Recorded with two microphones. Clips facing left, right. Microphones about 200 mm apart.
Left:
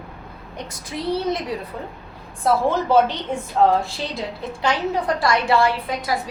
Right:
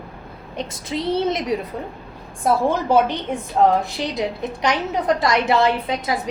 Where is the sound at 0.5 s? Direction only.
25° right (ahead or behind).